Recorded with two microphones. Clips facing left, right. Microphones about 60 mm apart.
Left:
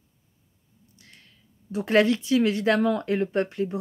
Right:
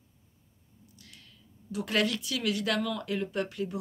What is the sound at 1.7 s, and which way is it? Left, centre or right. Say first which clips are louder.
A woman's voice: left 8 dB; left.